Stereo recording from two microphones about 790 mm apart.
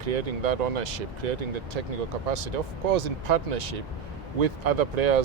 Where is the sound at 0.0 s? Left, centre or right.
Right.